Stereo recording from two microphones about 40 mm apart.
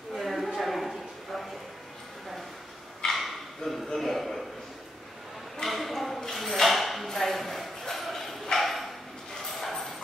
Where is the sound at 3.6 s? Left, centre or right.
Centre.